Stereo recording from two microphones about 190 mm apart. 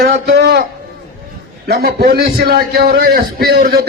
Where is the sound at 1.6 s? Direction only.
55° right (ahead or behind).